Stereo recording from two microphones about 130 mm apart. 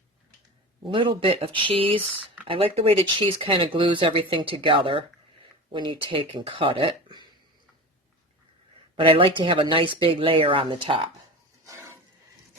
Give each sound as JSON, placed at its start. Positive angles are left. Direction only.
{"t": 0.9, "sound": "speech", "side_deg": -40}
{"t": 9.0, "sound": "speech", "side_deg": -40}
{"t": 11.6, "sound": "a sound", "side_deg": -25}